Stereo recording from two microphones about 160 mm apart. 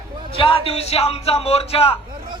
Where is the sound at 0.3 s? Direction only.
35° left (ahead or behind).